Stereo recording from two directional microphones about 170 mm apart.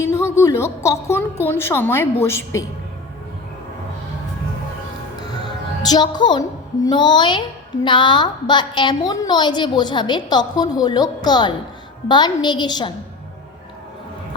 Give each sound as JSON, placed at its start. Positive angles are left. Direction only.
{"t": 0.0, "sound": "a woman's voice", "side_deg": 15}
{"t": 5.8, "sound": "a woman's voice", "side_deg": 25}